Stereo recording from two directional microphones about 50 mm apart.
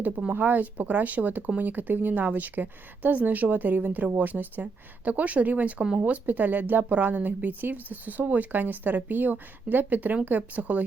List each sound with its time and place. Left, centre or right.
0.3 s speech: right